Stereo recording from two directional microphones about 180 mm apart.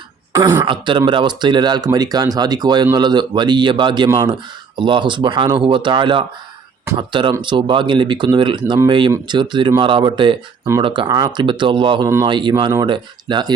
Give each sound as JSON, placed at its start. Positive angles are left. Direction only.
{"t": 0.3, "sound": "speech", "side_deg": -20}